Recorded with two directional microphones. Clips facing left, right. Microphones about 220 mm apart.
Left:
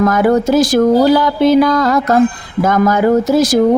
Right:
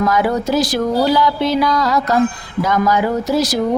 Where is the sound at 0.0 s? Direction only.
50° left (ahead or behind).